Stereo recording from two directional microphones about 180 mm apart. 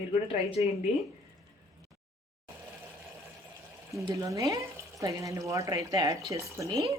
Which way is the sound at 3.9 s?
20° right (ahead or behind).